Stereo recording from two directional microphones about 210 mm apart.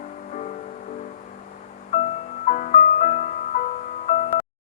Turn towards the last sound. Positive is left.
turn(degrees=35)  # may be behind; listen again after turning